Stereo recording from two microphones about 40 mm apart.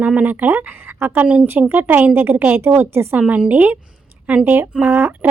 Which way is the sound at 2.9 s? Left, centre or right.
Right.